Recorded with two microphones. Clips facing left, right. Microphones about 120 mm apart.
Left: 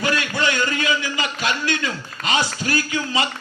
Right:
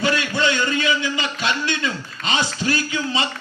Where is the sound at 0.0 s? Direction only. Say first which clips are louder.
Right 1 dB; 25° right (ahead or behind).